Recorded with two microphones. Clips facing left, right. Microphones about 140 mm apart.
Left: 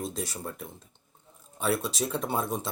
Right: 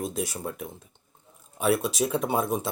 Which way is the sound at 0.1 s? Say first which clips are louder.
Right 4 dB; 5° right (ahead or behind).